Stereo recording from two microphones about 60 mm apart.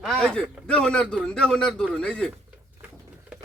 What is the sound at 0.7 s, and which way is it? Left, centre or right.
A man's voice, centre.